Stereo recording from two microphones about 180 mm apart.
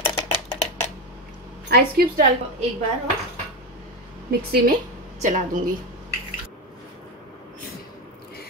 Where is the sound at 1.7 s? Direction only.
60° right (ahead or behind).